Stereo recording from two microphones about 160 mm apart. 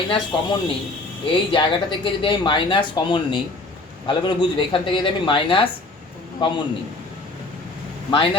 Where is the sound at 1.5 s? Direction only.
30° left (ahead or behind).